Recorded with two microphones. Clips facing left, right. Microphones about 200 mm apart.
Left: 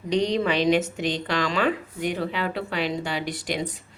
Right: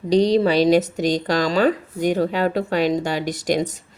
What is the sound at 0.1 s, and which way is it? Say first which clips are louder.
Speech: right 7 dB; 35° right (ahead or behind).